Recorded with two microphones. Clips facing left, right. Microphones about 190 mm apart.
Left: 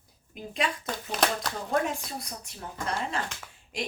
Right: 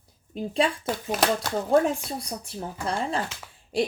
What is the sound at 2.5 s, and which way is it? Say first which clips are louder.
Speech: right 3 dB; 30° right (ahead or behind).